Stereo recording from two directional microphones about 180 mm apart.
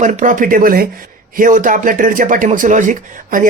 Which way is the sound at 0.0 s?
45° right (ahead or behind).